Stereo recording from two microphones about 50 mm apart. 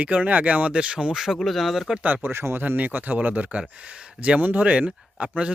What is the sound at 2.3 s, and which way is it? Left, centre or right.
Speech, right.